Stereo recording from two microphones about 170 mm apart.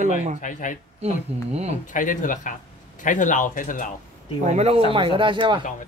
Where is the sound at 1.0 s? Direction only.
40° right (ahead or behind).